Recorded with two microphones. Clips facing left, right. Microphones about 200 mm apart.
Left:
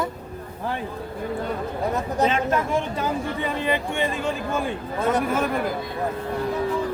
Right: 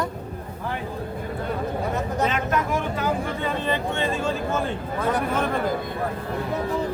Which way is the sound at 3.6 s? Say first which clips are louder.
Left 2 dB; 15° left (ahead or behind).